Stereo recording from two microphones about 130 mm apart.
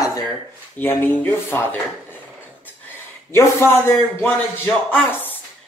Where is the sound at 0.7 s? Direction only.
15° left (ahead or behind).